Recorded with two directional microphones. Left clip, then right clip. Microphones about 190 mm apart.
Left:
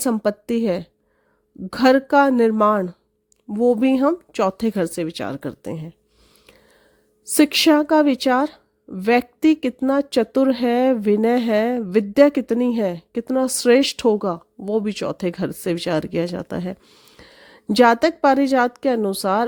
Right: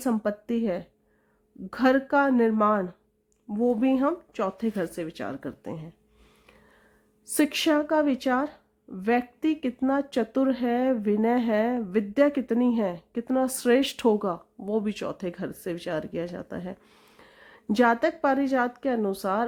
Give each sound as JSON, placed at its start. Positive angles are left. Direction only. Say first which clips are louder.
{"t": 0.0, "sound": "a woman's voice", "louder": "left 7 dB", "side_deg": 40}
{"t": 7.3, "sound": "a woman's voice", "louder": "left 8 dB", "side_deg": 35}
{"t": 16.8, "sound": "a sound", "louder": "left 6 dB", "side_deg": 20}
{"t": 17.2, "sound": "a woman's voice", "louder": "left 5 dB", "side_deg": 35}